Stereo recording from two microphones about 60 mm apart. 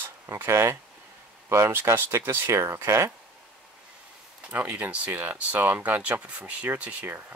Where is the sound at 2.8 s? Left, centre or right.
Right.